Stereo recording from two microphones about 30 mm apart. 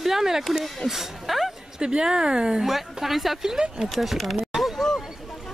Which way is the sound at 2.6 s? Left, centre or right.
Centre.